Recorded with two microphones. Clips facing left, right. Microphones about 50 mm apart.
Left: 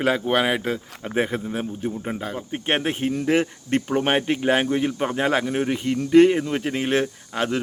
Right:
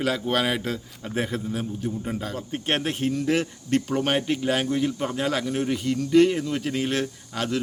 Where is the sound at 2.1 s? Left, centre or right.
Centre.